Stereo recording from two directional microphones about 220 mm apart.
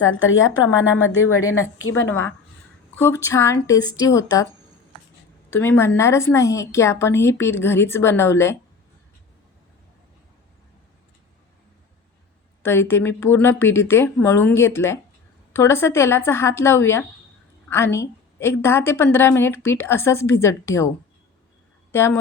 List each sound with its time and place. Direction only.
0.1 s a woman's voice: 60° left (ahead or behind)
1.2 s a woman's voice: 15° left (ahead or behind)
1.5 s speech: 65° left (ahead or behind)
2.9 s a woman's voice: 10° left (ahead or behind)
5.5 s a woman's voice: 10° left (ahead or behind)
12.6 s a woman's voice: 10° left (ahead or behind)
21.9 s a woman's voice: 10° left (ahead or behind)